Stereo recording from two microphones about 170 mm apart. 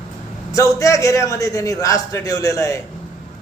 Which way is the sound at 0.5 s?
20° left (ahead or behind).